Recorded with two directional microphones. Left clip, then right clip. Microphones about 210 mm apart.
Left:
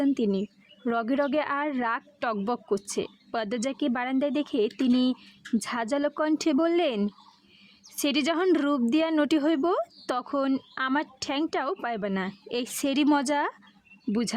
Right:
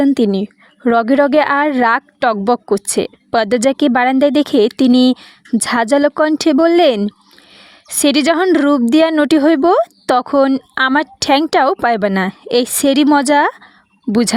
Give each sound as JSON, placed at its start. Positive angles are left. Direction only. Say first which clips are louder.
{"t": 0.0, "sound": "a woman's voice", "louder": "right 12 dB", "side_deg": -45}